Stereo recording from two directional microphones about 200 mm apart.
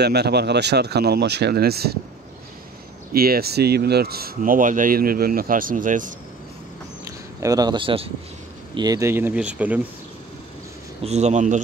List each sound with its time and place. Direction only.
0.0 s speech: 55° right (ahead or behind)
3.1 s speech: 50° right (ahead or behind)
7.1 s speech: 15° right (ahead or behind)
11.1 s a man's voice: 35° right (ahead or behind)